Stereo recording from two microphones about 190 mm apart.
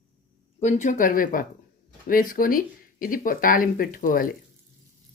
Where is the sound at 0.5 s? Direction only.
40° left (ahead or behind).